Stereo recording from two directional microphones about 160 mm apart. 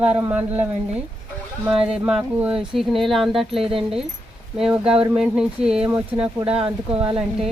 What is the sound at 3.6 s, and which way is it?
Speech, 35° right (ahead or behind).